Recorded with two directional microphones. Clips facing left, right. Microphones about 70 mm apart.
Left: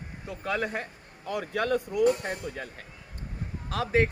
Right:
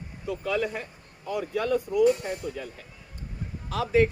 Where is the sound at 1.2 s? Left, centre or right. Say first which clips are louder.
Right 1 dB; left.